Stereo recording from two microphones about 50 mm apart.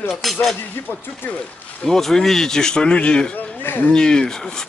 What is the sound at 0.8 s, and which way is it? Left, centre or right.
Speech, left.